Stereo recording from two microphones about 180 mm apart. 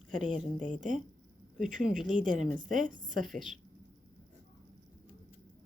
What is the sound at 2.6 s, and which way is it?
Speech, 50° right (ahead or behind).